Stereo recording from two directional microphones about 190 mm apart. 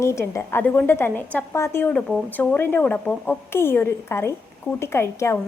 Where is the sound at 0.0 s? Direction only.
15° left (ahead or behind).